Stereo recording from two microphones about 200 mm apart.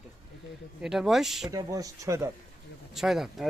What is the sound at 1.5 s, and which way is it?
Speech, 15° right (ahead or behind).